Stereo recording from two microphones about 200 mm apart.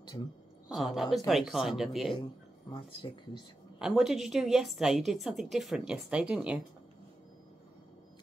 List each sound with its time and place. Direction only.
0.7 s a woman's voice: centre (ahead or behind)
2.7 s speech: 25° left (ahead or behind)
3.8 s a woman's voice: centre (ahead or behind)